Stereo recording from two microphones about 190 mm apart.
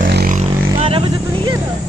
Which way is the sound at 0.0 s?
50° right (ahead or behind).